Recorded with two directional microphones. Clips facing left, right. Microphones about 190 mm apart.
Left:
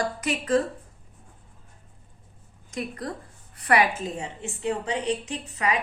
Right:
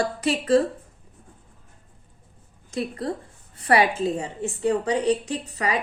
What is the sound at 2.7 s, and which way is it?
A woman's voice, 30° right (ahead or behind).